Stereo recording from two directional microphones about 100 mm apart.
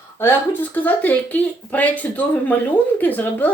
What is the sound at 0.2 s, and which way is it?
Speech, 20° left (ahead or behind).